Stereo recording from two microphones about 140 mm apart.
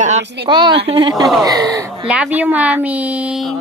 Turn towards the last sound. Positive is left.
turn(degrees=0)  # may be behind; listen again after turning